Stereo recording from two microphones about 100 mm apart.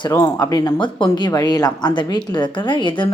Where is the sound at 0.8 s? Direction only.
55° left (ahead or behind).